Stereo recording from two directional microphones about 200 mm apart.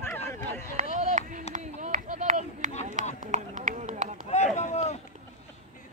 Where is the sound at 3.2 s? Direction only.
40° right (ahead or behind).